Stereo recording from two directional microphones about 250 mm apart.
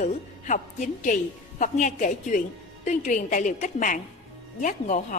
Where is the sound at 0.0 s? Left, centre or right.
Left.